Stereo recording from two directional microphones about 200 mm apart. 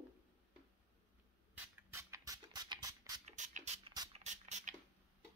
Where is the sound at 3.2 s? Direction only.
40° right (ahead or behind).